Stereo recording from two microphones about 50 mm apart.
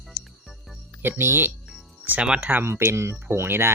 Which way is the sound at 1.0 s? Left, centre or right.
Right.